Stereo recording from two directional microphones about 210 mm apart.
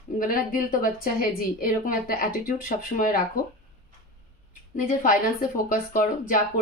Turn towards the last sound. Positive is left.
turn(degrees=40)  # may be behind; listen again after turning